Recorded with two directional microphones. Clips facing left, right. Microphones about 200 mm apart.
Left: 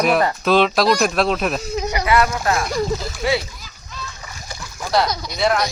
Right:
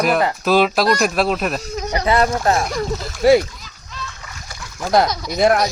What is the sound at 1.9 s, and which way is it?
Speech, 35° right (ahead or behind).